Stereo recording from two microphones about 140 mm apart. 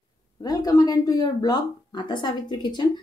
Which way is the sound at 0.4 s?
25° left (ahead or behind).